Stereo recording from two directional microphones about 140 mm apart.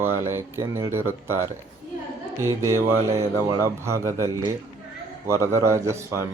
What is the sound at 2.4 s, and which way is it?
A man's voice, 20° right (ahead or behind).